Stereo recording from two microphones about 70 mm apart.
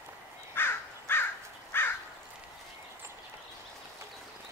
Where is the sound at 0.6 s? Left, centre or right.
Left.